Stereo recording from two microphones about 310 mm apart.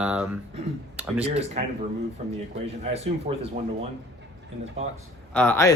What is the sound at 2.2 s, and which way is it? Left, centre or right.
Speech, right.